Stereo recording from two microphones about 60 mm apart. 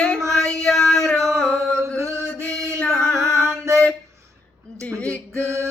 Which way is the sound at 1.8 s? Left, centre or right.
Right.